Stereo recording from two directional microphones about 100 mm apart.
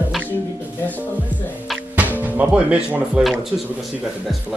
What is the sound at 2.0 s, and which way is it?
Speech, 15° right (ahead or behind).